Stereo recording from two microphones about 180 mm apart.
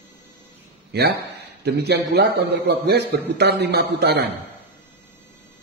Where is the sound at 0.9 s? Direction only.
65° right (ahead or behind).